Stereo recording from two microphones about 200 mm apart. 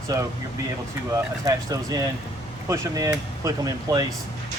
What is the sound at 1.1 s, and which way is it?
Speech, 15° right (ahead or behind).